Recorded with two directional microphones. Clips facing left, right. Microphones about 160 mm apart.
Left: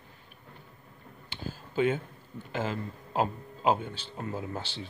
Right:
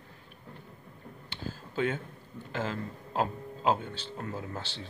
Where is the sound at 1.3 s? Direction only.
5° left (ahead or behind).